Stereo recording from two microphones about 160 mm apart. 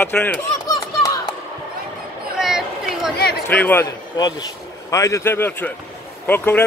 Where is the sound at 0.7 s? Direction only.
25° left (ahead or behind).